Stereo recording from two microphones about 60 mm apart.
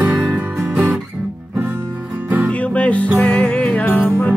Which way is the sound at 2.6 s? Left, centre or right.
Left.